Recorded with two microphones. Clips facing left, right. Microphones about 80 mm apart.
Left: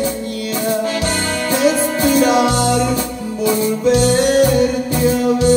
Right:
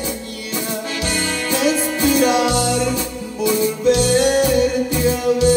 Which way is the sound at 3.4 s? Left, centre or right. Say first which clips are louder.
Left 1 dB; left.